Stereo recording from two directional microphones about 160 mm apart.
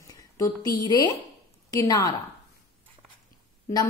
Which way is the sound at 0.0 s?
20° left (ahead or behind).